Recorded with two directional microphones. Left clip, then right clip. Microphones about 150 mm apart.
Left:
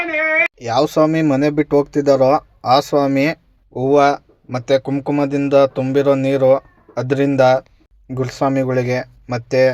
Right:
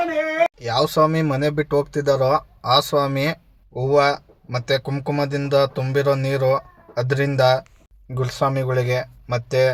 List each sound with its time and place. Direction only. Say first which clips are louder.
0.6 s speech: left 3 dB; 20° left (ahead or behind)